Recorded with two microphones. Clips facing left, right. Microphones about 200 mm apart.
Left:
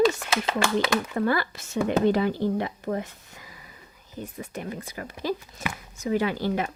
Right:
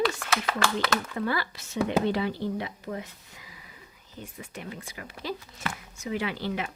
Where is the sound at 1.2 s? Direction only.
50° left (ahead or behind).